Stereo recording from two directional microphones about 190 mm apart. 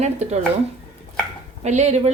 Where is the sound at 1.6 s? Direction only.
35° right (ahead or behind).